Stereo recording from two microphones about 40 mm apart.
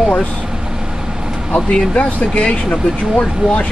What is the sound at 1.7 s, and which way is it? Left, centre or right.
Speech, left.